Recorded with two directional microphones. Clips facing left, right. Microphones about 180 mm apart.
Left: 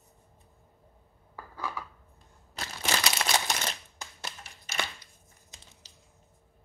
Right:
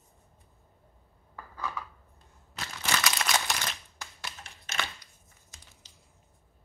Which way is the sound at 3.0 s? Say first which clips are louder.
Even; 25° left (ahead or behind).